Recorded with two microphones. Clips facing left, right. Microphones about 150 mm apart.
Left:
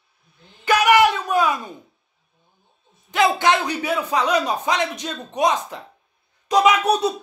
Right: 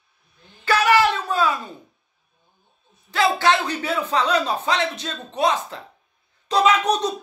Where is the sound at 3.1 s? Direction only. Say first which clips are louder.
Left 1 dB; 20° left (ahead or behind).